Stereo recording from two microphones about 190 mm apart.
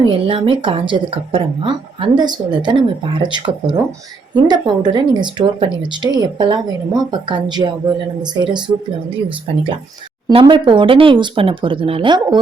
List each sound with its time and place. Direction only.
0.0 s a woman's voice: 25° right (ahead or behind)
10.2 s a woman's voice: 25° right (ahead or behind)